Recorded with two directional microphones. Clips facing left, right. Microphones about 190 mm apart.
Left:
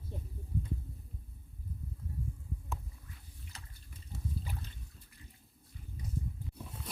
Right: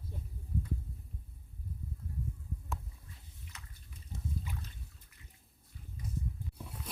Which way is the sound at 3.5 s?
30° left (ahead or behind).